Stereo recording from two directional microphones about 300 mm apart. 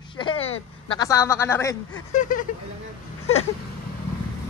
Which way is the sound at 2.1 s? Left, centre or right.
Left.